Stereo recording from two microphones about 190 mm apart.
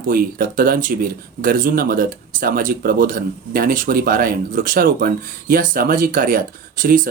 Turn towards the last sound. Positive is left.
turn(degrees=-45)  # may be behind; listen again after turning